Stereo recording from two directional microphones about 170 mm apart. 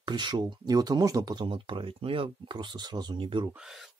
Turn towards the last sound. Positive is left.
turn(degrees=-30)  # may be behind; listen again after turning